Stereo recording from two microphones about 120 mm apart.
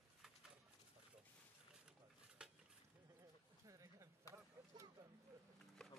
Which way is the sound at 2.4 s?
5° right (ahead or behind).